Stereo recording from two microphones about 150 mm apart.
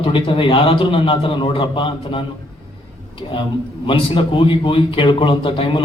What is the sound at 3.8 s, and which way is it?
A man's voice, 35° left (ahead or behind).